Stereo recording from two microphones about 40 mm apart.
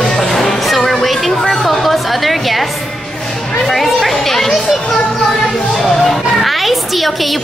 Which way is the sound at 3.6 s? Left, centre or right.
Centre.